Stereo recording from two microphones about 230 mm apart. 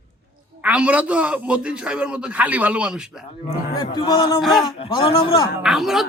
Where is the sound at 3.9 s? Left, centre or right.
Centre.